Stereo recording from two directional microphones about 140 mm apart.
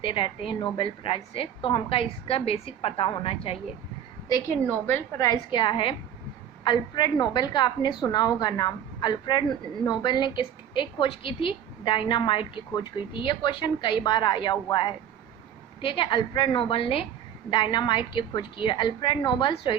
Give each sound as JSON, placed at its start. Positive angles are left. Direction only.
{"t": 0.0, "sound": "speech", "side_deg": 40}
{"t": 4.7, "sound": "a woman's voice", "side_deg": 15}
{"t": 5.5, "sound": "speech", "side_deg": 35}